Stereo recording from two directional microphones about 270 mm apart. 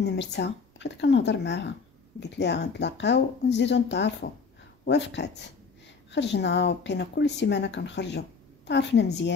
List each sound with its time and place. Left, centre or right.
0.0 s speech: left